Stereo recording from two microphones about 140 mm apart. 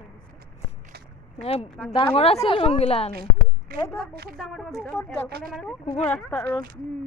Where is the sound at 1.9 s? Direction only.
40° left (ahead or behind).